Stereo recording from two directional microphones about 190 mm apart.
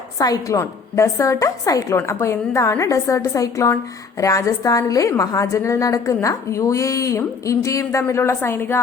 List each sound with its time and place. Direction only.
0.2 s a woman's voice: 15° left (ahead or behind)